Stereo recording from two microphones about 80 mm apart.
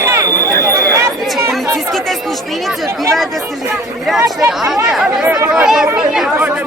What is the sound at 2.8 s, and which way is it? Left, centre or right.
Speech, right.